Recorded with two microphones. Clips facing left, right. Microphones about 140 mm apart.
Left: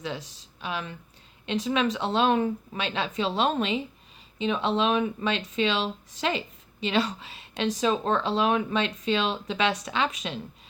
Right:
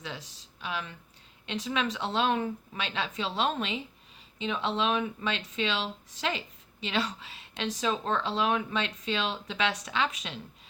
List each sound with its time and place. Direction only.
0.6 s speech: 25° left (ahead or behind)